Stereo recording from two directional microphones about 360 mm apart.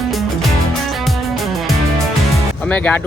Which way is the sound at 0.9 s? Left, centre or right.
Centre.